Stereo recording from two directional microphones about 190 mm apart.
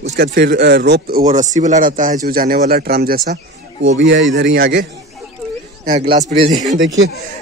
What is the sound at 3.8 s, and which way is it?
Speech, 75° right (ahead or behind).